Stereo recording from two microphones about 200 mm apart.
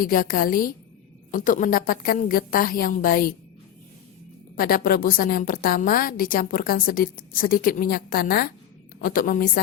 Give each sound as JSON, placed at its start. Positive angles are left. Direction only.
{"t": 0.0, "sound": "a woman's voice", "side_deg": 45}
{"t": 4.5, "sound": "a woman's voice", "side_deg": 45}